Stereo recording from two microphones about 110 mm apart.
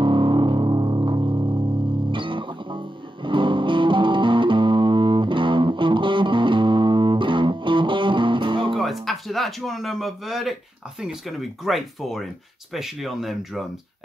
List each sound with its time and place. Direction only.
0.0 s music: 45° right (ahead or behind)
8.7 s a sound: centre (ahead or behind)
11.0 s speech: 5° right (ahead or behind)